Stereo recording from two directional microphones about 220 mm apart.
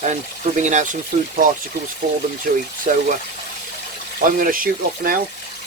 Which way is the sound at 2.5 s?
40° right (ahead or behind).